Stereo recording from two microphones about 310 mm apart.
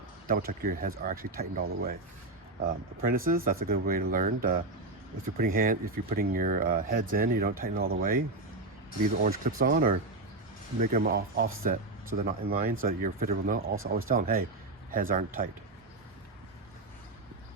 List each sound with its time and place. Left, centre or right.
0.3 s speech: right
9.2 s speech: right
13.7 s speech: right
14.1 s speech: right